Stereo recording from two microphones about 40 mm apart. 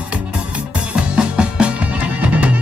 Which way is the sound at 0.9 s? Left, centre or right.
Right.